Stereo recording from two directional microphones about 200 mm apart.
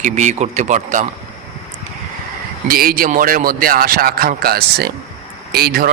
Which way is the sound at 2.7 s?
45° right (ahead or behind).